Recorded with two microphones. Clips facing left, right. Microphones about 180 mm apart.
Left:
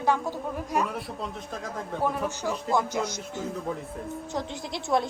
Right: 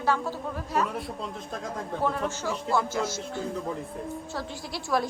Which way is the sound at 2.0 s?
10° left (ahead or behind).